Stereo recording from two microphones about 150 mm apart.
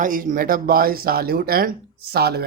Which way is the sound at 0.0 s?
65° right (ahead or behind).